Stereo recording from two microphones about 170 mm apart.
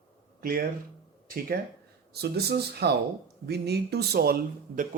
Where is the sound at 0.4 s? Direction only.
60° right (ahead or behind).